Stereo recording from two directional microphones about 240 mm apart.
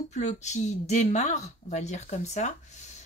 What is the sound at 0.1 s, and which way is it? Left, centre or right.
A woman's voice, left.